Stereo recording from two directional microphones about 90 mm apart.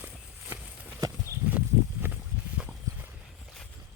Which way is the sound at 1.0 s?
45° right (ahead or behind).